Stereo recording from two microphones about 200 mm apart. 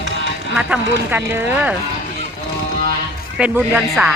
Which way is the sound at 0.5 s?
5° right (ahead or behind).